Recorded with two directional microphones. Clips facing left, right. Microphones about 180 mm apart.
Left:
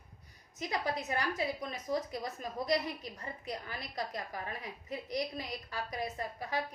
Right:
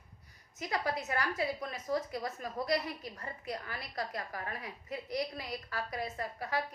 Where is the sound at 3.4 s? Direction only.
20° left (ahead or behind).